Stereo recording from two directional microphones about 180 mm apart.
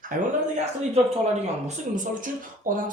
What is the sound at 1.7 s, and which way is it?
Speech, 45° right (ahead or behind).